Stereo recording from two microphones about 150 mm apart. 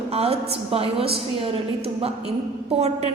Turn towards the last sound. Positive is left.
turn(degrees=-45)  # may be behind; listen again after turning